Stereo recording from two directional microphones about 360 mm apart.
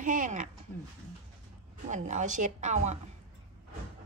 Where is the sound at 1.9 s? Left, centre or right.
Centre.